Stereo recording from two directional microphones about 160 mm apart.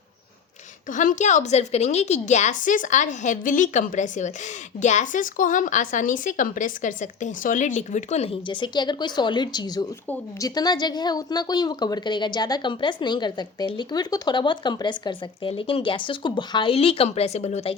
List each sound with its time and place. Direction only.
0.9 s a woman's voice: 55° left (ahead or behind)